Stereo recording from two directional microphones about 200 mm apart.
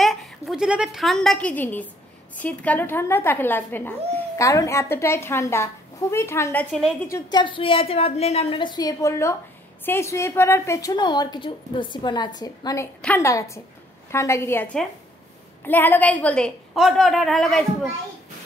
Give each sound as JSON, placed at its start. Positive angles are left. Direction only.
{"t": 0.0, "sound": "a woman's voice", "side_deg": 0}
{"t": 7.1, "sound": "a woman's voice", "side_deg": 20}